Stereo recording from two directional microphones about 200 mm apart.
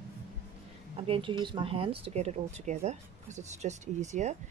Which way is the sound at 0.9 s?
30° right (ahead or behind).